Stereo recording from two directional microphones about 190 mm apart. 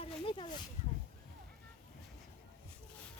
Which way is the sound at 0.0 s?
25° left (ahead or behind).